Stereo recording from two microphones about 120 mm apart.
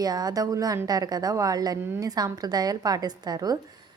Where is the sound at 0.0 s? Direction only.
30° right (ahead or behind).